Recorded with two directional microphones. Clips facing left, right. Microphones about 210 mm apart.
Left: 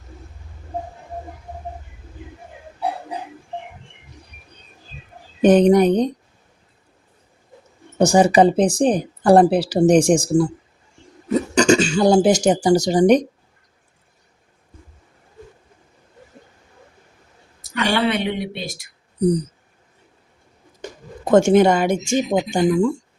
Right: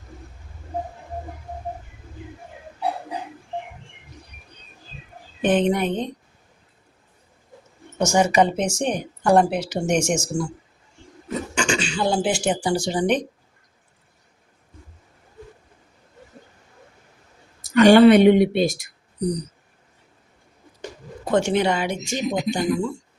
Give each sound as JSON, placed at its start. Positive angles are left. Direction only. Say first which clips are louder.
{"t": 5.4, "sound": "speech", "louder": "left 7 dB", "side_deg": 40}
{"t": 7.9, "sound": "speech", "louder": "left 5 dB", "side_deg": 35}
{"t": 11.5, "sound": "speech", "louder": "left 10 dB", "side_deg": 40}
{"t": 17.6, "sound": "speech", "louder": "right 9 dB", "side_deg": -45}
{"t": 20.8, "sound": "speech", "louder": "left 3 dB", "side_deg": 45}